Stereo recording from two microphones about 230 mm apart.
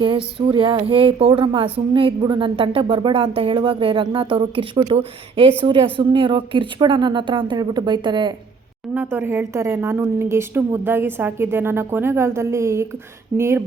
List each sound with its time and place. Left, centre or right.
0.0 s speech: right
9.0 s a woman's voice: centre